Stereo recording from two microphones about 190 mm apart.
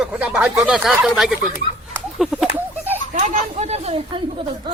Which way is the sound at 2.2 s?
Centre (ahead or behind).